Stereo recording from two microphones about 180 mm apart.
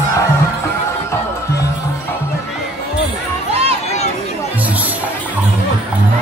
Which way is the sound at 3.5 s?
35° right (ahead or behind).